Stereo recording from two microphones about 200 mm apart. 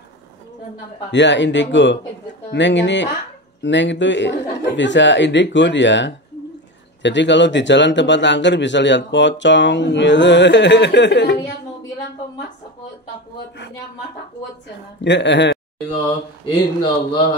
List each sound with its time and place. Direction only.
1.1 s a man's voice: 60° left (ahead or behind)
15.0 s a man's voice: 60° left (ahead or behind)
16.8 s speech: 25° left (ahead or behind)